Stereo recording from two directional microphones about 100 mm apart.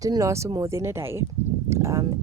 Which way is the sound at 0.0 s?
35° right (ahead or behind).